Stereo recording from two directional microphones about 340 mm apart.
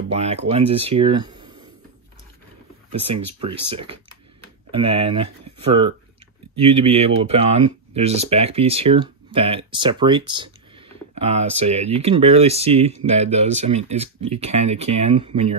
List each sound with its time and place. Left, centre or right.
0.1 s speech: centre
2.9 s speech: centre